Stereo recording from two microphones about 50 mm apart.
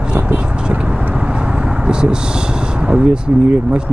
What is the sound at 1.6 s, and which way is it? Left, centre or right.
Speech, centre.